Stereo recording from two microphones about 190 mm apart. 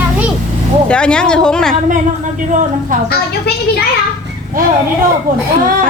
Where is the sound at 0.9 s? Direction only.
5° left (ahead or behind).